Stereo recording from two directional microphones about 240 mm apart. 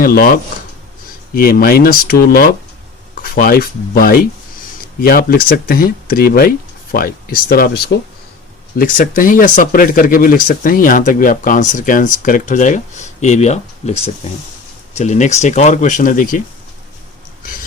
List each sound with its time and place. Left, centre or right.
0.0 s speech: left